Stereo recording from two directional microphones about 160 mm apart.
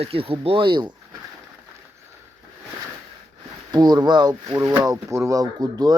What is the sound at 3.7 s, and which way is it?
Speech, 25° right (ahead or behind).